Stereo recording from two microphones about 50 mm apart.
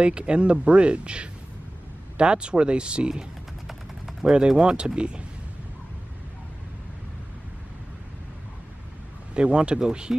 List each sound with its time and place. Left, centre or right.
0.0 s speech: right
9.3 s speech: right